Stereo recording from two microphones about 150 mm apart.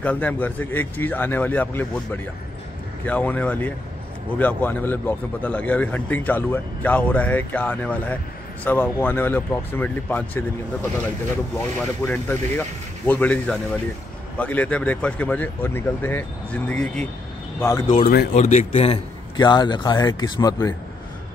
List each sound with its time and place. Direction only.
0.0 s a man's voice: 10° left (ahead or behind)
3.1 s a man's voice: 10° left (ahead or behind)
17.6 s speech: 20° left (ahead or behind)
17.9 s speech: 80° left
18.3 s speech: 50° left (ahead or behind)
19.3 s speech: 30° left (ahead or behind)